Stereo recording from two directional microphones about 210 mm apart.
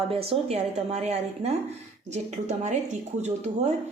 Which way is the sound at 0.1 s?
25° right (ahead or behind).